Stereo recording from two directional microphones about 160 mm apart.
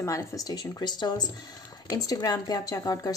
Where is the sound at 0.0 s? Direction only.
20° left (ahead or behind).